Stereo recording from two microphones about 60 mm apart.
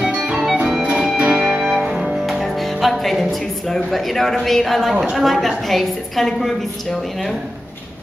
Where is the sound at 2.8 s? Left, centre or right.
Centre.